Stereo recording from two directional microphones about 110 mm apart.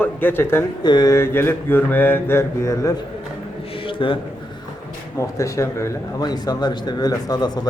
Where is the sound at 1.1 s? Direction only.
20° left (ahead or behind).